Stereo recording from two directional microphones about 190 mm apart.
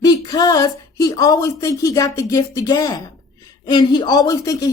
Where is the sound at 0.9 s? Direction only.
20° left (ahead or behind).